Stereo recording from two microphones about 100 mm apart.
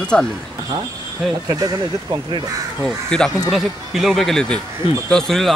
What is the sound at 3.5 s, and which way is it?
A man's voice, 5° right (ahead or behind).